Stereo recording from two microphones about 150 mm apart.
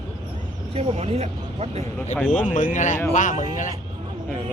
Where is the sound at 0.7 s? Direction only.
45° right (ahead or behind).